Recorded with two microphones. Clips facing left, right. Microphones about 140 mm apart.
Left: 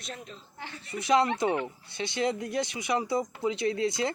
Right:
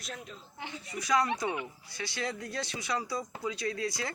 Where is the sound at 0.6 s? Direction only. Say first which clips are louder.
Right 1 dB; 15° right (ahead or behind).